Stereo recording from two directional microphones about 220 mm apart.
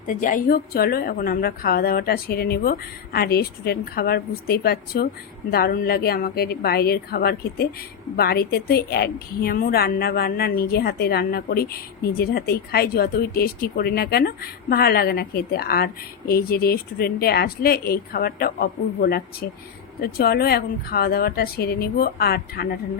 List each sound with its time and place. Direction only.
0.1 s speech: 35° left (ahead or behind)